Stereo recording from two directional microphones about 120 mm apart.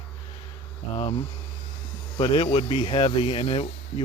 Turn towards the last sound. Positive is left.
turn(degrees=55)  # may be behind; listen again after turning